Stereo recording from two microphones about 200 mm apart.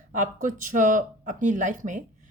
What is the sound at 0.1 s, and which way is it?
A woman's voice, 40° right (ahead or behind).